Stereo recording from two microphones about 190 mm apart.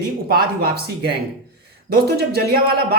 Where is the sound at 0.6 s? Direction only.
55° right (ahead or behind).